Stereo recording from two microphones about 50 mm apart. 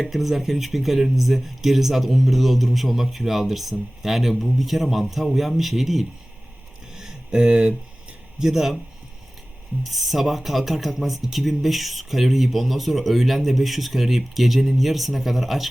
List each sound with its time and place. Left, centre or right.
0.0 s speech: centre
6.9 s a sound: centre
8.4 s speech: centre
9.8 s speech: centre